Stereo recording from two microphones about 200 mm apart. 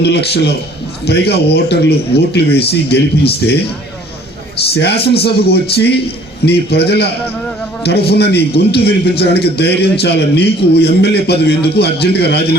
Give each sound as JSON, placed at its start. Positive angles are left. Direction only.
{"t": 0.0, "sound": "a man's voice", "side_deg": 55}
{"t": 4.7, "sound": "a man's voice", "side_deg": 55}